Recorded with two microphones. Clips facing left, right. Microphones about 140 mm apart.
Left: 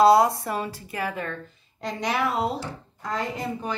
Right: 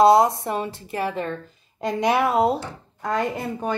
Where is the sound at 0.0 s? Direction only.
20° right (ahead or behind).